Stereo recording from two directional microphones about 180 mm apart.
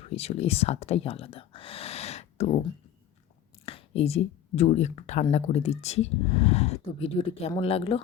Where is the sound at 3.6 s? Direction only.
30° left (ahead or behind).